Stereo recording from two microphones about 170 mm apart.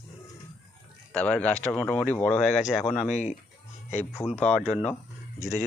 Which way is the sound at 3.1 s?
45° left (ahead or behind).